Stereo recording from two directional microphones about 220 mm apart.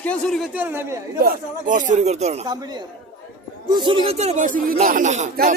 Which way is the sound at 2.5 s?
20° right (ahead or behind).